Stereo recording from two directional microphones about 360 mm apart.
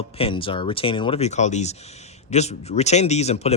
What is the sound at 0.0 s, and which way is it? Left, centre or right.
Speech, centre.